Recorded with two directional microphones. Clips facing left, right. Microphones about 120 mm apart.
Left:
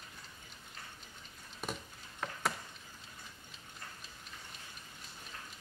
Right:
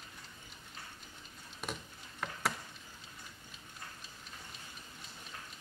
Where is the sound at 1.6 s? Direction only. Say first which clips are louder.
Left 1 dB; centre (ahead or behind).